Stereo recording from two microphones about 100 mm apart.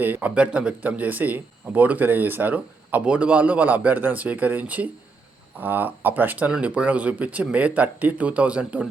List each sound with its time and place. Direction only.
0.0 s speech: 15° right (ahead or behind)